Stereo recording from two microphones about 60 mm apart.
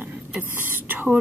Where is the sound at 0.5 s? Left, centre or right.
Right.